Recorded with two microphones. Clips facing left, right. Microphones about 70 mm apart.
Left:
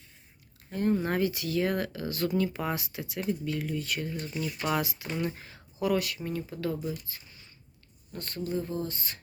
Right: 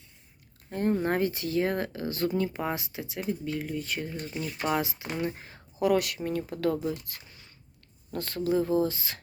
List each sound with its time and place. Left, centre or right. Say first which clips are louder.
0.7 s speech: right 1 dB; right
5.8 s speech: right 3 dB; right
6.7 s speech: right 4 dB; right
7.0 s a sound: right 2 dB; right
8.1 s speech: right 6 dB; right